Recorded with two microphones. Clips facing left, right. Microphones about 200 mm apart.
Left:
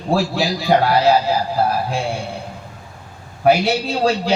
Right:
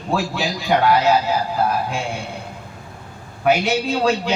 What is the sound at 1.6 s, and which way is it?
Music, 35° left (ahead or behind).